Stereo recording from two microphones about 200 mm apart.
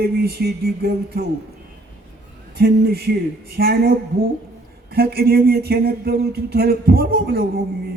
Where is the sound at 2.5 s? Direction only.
50° right (ahead or behind).